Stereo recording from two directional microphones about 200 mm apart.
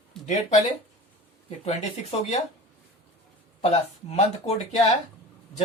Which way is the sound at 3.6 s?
30° left (ahead or behind).